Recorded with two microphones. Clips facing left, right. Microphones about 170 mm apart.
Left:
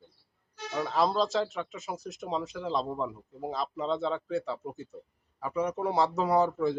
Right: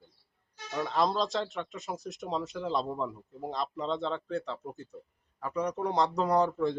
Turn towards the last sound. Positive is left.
turn(degrees=5)  # may be behind; listen again after turning